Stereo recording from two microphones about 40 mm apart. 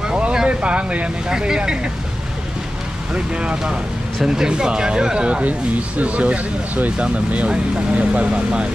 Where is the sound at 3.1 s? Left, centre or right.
Right.